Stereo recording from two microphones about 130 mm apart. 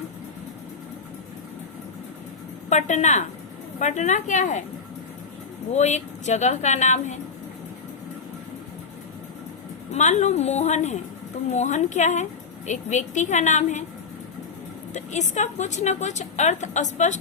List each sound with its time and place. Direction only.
2.6 s a woman's voice: 65° left (ahead or behind)
5.7 s a woman's voice: 60° left (ahead or behind)
9.9 s a woman's voice: 65° left (ahead or behind)
14.9 s a woman's voice: 65° left (ahead or behind)